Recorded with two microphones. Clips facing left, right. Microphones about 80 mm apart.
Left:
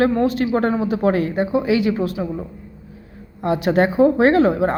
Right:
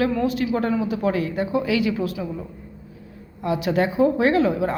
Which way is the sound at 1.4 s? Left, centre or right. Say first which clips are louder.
Left 4 dB; left.